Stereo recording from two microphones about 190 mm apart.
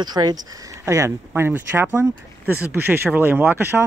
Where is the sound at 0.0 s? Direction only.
20° right (ahead or behind).